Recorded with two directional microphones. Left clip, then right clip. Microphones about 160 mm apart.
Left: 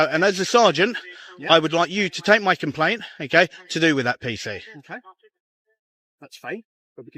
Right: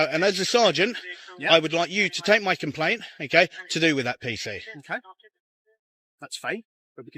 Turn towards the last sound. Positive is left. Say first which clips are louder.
# left 1 dB
turn(degrees=0)  # may be behind; listen again after turning